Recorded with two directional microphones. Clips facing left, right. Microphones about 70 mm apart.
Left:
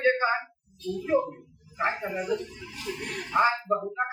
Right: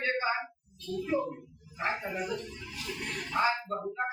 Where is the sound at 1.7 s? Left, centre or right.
Left.